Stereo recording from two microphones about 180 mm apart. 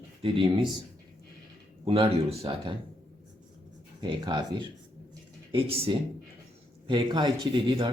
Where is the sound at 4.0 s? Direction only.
25° right (ahead or behind).